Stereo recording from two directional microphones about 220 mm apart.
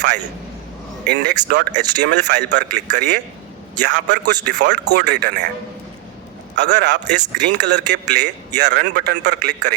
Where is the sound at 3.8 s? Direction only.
50° right (ahead or behind).